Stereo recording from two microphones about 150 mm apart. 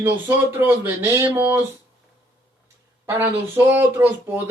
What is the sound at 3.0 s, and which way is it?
Speech, 15° right (ahead or behind).